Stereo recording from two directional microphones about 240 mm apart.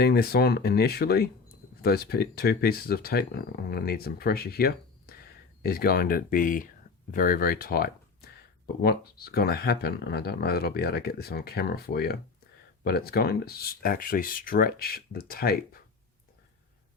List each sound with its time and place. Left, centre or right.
0.0 s speech: left